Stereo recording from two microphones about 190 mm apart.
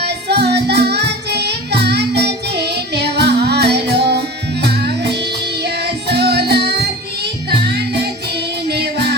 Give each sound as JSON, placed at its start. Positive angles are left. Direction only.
{"t": 0.0, "sound": "music", "side_deg": -60}